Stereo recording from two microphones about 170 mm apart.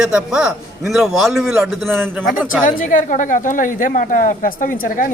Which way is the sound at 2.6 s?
50° left (ahead or behind).